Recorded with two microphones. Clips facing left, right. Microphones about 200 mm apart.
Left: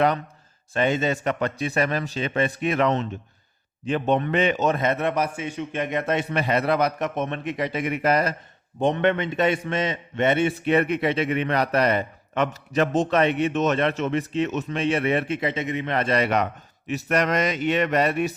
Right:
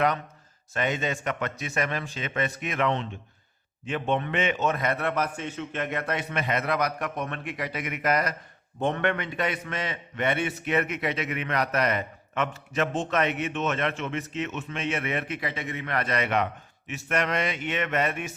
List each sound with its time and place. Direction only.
0.7 s a man's voice: 30° left (ahead or behind)